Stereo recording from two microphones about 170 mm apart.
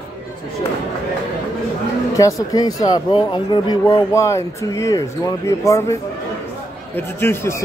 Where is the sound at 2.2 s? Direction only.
20° left (ahead or behind).